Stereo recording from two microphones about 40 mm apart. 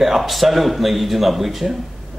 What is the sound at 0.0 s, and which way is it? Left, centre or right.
Speech, centre.